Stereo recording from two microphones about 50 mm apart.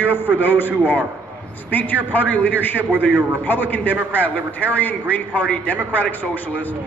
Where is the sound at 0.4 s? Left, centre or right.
Left.